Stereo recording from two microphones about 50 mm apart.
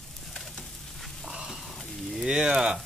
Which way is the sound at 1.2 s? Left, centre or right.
Centre.